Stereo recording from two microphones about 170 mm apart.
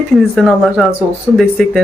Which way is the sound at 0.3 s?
Centre (ahead or behind).